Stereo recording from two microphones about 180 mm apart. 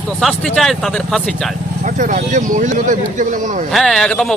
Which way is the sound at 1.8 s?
45° right (ahead or behind).